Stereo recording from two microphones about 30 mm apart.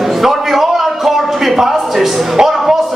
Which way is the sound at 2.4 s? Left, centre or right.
Right.